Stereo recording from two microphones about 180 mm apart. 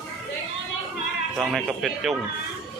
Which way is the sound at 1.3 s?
Centre (ahead or behind).